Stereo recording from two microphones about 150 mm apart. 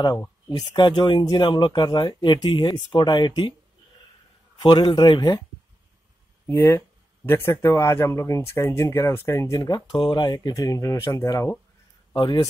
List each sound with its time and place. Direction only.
0.5 s speech: 30° left (ahead or behind)
4.6 s speech: 30° left (ahead or behind)
6.4 s speech: 15° left (ahead or behind)
12.1 s speech: 30° left (ahead or behind)